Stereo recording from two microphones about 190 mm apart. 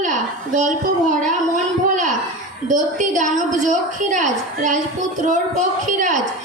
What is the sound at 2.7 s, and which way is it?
A woman's voice, 40° right (ahead or behind).